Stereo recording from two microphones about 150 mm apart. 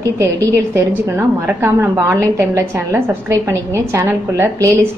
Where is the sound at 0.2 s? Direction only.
20° right (ahead or behind).